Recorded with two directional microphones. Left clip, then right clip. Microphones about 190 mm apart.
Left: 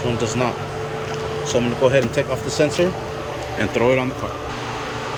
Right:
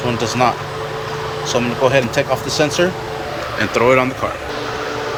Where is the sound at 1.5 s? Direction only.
15° left (ahead or behind).